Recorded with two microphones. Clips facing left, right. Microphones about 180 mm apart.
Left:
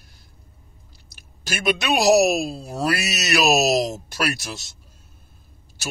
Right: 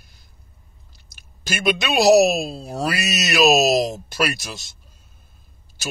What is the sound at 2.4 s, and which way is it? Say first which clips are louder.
Speech: left 1 dB; 20° right (ahead or behind).